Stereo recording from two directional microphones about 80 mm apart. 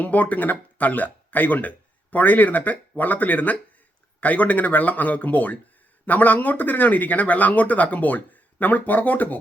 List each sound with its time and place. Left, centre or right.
0.0 s speech: centre